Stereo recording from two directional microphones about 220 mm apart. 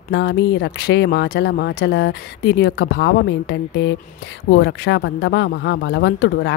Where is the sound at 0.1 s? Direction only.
55° left (ahead or behind).